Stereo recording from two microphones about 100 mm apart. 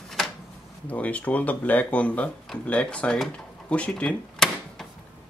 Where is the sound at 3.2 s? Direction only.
10° left (ahead or behind).